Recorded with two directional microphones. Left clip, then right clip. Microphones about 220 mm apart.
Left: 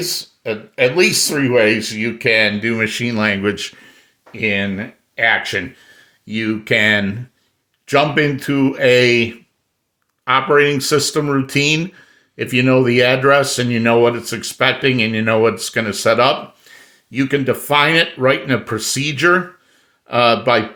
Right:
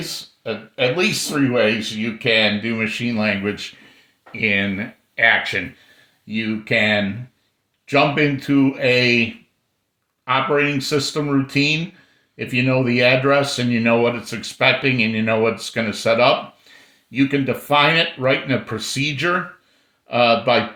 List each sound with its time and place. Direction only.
0.4 s speech: 45° left (ahead or behind)
4.3 s speech: 30° left (ahead or behind)
6.2 s speech: 50° left (ahead or behind)